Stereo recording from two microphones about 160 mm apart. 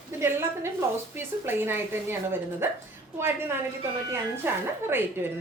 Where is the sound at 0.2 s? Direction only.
15° right (ahead or behind).